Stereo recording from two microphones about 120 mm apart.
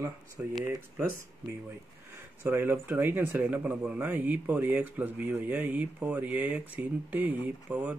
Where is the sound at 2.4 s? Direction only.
15° right (ahead or behind).